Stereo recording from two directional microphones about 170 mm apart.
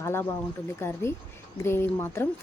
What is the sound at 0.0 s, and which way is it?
Speech, 15° left (ahead or behind).